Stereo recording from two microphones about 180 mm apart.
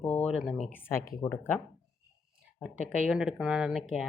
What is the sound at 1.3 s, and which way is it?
Speech, 5° left (ahead or behind).